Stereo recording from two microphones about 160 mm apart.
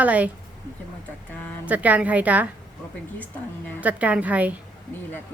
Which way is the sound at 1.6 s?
10° right (ahead or behind).